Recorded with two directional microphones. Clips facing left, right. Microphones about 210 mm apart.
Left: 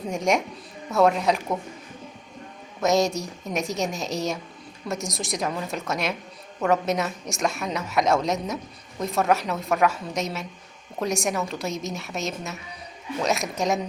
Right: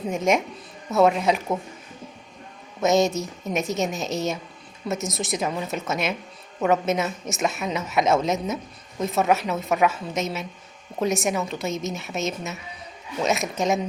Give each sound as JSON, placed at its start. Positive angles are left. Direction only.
{"t": 0.1, "sound": "a woman's voice", "side_deg": 0}
{"t": 2.8, "sound": "a woman's voice", "side_deg": 0}